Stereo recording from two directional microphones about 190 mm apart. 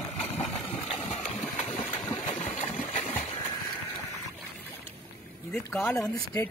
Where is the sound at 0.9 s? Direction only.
35° left (ahead or behind).